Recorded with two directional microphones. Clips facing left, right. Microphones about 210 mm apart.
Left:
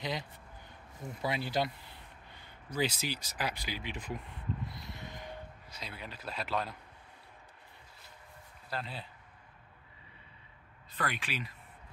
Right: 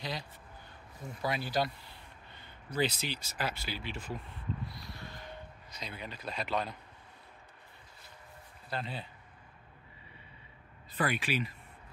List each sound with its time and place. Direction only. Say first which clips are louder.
0.0 s speech: left 2 dB; 20° left (ahead or behind)
2.4 s speech: right 1 dB; 10° left (ahead or behind)
4.7 s a sound: left 1 dB; 20° left (ahead or behind); by 6.8 s centre (ahead or behind)
8.6 s speech: right 2 dB; centre (ahead or behind)
11.0 s speech: right 5 dB; 5° right (ahead or behind)